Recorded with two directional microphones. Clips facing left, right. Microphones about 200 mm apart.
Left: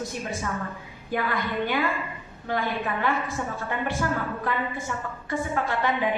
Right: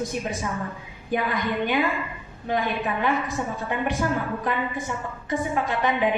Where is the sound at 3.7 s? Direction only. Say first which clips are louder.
Right 3 dB; 20° right (ahead or behind).